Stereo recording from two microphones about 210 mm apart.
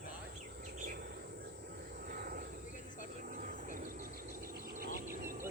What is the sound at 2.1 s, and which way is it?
Vehicle, 40° right (ahead or behind).